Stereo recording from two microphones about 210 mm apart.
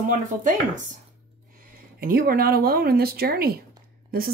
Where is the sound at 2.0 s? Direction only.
45° right (ahead or behind).